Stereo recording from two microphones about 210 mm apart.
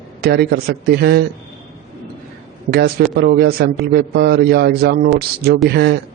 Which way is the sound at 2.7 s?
50° right (ahead or behind).